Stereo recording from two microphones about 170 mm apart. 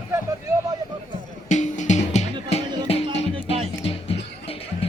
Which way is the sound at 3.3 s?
35° right (ahead or behind).